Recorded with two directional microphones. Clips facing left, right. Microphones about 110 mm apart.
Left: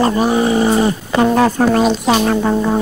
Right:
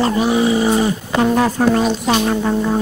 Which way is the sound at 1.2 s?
70° left (ahead or behind).